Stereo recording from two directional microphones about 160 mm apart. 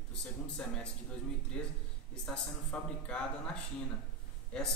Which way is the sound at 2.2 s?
5° left (ahead or behind).